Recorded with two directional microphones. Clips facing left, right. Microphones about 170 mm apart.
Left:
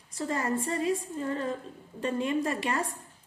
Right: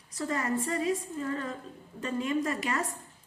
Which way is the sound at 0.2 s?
30° left (ahead or behind).